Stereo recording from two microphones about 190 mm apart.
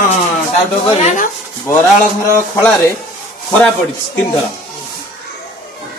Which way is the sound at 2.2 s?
15° left (ahead or behind).